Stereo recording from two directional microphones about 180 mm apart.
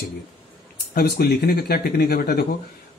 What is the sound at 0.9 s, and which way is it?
Speech, 55° left (ahead or behind).